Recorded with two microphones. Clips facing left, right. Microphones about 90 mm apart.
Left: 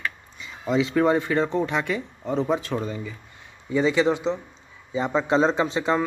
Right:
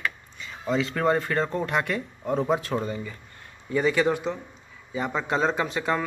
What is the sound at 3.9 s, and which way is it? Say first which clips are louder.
Speech: left 2 dB; 20° left (ahead or behind).